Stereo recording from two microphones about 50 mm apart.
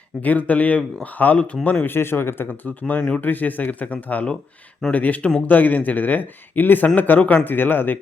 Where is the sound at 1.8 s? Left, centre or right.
Left.